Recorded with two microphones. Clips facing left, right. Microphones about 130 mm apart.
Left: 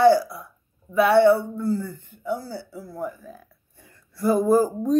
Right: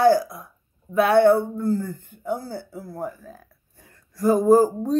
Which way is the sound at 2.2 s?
50° right (ahead or behind).